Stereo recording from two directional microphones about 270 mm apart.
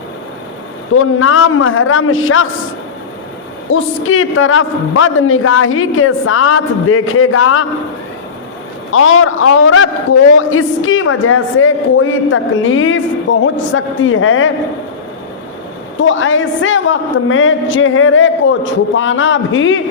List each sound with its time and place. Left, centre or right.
0.9 s a man's voice: left
3.7 s a man's voice: left
8.9 s a man's voice: left
16.0 s a man's voice: left